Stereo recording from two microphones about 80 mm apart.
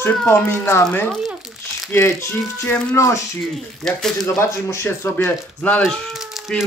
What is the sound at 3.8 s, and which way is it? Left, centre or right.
Speech, centre.